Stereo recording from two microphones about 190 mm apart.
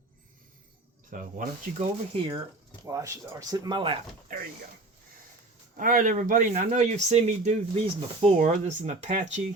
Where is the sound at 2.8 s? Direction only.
15° right (ahead or behind).